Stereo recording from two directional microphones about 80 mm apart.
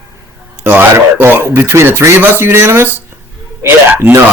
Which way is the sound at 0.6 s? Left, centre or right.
Right.